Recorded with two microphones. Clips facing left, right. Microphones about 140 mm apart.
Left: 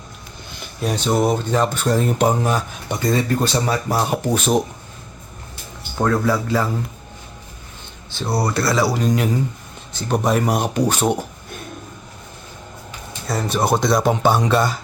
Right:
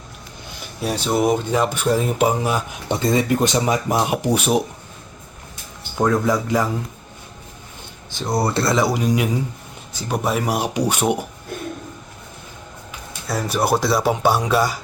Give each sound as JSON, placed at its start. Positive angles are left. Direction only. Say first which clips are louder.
{"t": 0.8, "sound": "speech", "louder": "left 1 dB", "side_deg": -5}
{"t": 2.9, "sound": "speech", "louder": "right 1 dB", "side_deg": -20}
{"t": 6.0, "sound": "speech", "louder": "even", "side_deg": -15}
{"t": 8.3, "sound": "speech", "louder": "right 1 dB", "side_deg": -25}
{"t": 13.2, "sound": "speech", "louder": "left 1 dB", "side_deg": -5}